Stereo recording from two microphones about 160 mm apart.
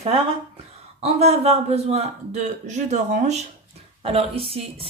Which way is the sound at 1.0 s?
40° right (ahead or behind).